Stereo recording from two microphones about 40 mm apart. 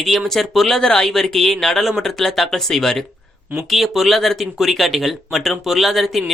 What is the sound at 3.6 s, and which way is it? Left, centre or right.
Speech, centre.